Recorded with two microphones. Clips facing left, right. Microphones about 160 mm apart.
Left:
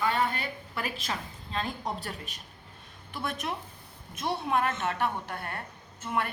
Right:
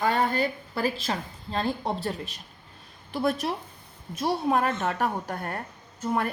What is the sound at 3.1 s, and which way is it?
A woman's voice, 35° right (ahead or behind).